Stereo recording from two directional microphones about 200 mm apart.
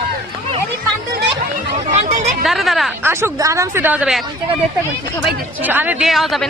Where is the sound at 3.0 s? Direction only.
15° right (ahead or behind).